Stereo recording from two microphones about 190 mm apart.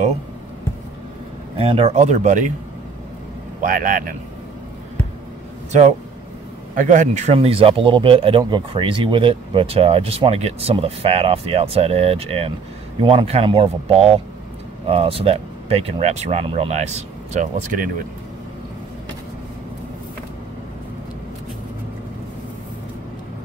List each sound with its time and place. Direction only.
1.6 s speech: 30° right (ahead or behind)
3.6 s speech: 45° right (ahead or behind)
5.7 s speech: 40° right (ahead or behind)
7.3 s speech: 30° right (ahead or behind)